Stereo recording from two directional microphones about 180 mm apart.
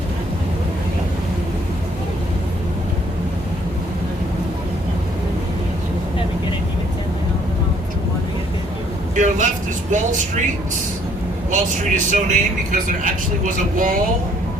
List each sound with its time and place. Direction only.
9.1 s vehicle: 45° right (ahead or behind)
9.9 s speech: 45° right (ahead or behind)
11.5 s speech: 45° right (ahead or behind)